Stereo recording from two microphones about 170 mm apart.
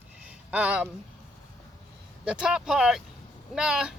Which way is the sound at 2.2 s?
5° right (ahead or behind).